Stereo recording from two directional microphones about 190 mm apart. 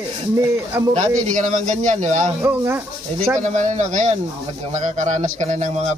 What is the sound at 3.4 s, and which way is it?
A man's voice, 40° right (ahead or behind).